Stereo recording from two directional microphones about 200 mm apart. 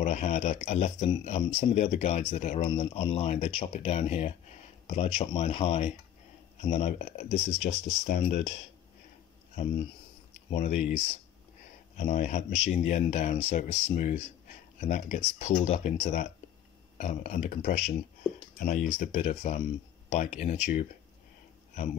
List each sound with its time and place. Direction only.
0.0 s speech: 35° left (ahead or behind)
10.5 s speech: 35° left (ahead or behind)
12.0 s speech: 35° left (ahead or behind)